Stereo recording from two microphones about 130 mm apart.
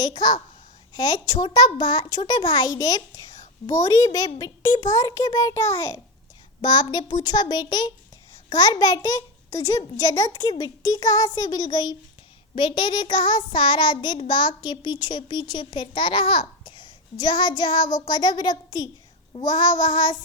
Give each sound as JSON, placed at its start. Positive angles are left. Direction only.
{"t": 0.0, "sound": "child singing", "side_deg": 35}
{"t": 3.7, "sound": "a child's voice", "side_deg": 25}
{"t": 6.6, "sound": "child singing", "side_deg": 35}